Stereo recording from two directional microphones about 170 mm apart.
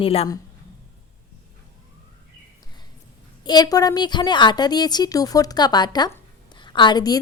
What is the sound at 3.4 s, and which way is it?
A woman's voice, 25° left (ahead or behind).